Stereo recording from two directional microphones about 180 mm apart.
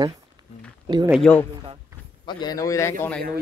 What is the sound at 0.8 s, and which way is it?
Speech, 25° right (ahead or behind).